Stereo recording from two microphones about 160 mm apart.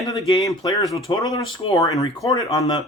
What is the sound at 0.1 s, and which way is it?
Speech, 20° left (ahead or behind).